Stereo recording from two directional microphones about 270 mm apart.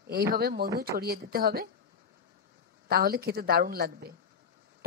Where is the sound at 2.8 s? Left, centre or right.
Right.